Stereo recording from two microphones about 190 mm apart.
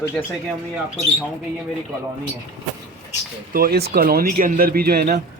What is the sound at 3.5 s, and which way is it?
Speech, 50° right (ahead or behind).